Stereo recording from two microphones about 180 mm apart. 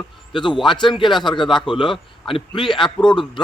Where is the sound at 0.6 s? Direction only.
25° left (ahead or behind).